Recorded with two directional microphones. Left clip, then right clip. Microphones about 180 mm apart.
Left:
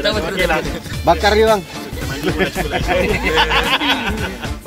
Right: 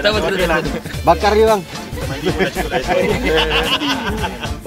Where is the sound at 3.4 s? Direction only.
25° left (ahead or behind).